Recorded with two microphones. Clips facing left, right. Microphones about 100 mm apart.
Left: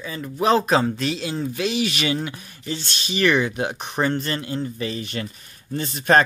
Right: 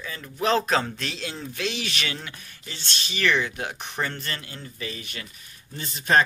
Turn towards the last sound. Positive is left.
turn(degrees=50)  # may be behind; listen again after turning